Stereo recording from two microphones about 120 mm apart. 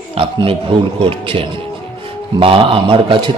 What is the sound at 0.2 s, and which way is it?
A man's voice, 50° right (ahead or behind).